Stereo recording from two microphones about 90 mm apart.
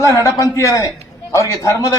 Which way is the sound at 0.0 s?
35° left (ahead or behind).